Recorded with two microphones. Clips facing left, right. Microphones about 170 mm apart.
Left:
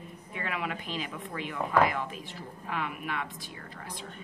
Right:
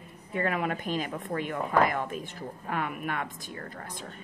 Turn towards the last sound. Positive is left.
turn(degrees=-45)  # may be behind; listen again after turning